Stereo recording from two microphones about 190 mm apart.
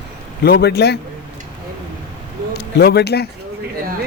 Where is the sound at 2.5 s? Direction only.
60° left (ahead or behind).